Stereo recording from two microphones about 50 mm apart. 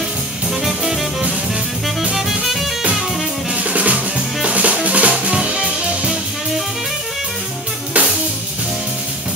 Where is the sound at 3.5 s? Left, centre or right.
Right.